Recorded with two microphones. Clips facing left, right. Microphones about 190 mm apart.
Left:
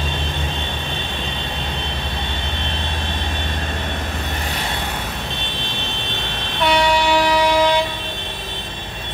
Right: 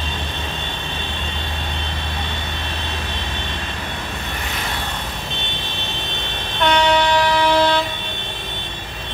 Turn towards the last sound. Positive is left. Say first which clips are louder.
# left 1 dB
turn(degrees=10)  # may be behind; listen again after turning